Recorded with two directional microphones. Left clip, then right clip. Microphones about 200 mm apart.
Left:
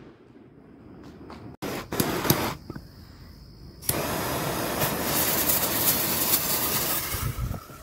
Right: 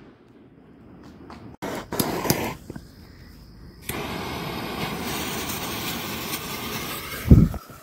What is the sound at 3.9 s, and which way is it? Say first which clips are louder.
Vehicle: left 2 dB; 40° left (ahead or behind).